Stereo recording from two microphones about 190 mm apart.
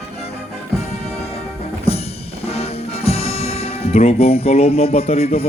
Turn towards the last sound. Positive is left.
turn(degrees=30)  # may be behind; listen again after turning